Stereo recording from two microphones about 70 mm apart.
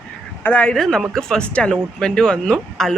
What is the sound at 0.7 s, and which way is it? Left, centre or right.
Speech, centre.